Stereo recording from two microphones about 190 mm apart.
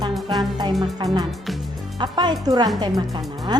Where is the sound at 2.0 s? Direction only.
25° right (ahead or behind).